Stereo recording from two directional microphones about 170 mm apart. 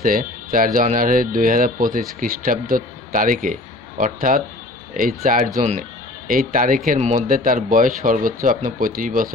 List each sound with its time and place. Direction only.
0.0 s speech: 55° right (ahead or behind)